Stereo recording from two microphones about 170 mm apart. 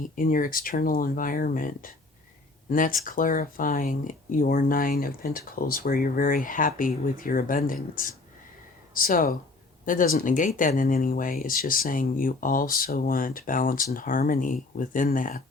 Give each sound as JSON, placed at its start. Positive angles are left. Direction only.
{"t": 0.2, "sound": "speech", "side_deg": 55}